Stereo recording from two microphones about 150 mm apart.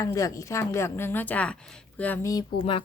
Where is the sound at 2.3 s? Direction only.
25° left (ahead or behind).